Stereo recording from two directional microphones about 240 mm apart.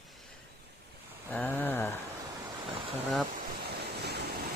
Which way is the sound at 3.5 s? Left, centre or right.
Right.